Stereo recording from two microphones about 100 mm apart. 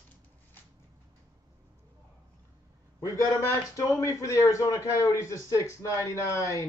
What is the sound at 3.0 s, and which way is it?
A man's voice, 35° left (ahead or behind).